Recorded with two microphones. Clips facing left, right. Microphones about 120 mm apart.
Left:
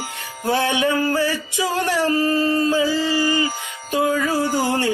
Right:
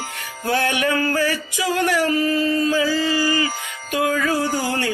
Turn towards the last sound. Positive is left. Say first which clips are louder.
# left 3 dB
turn(degrees=25)  # may be behind; listen again after turning